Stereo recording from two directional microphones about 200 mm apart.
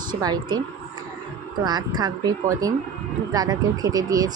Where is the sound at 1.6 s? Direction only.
20° right (ahead or behind).